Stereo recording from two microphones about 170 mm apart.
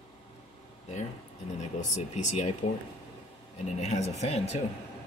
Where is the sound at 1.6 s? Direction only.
45° left (ahead or behind).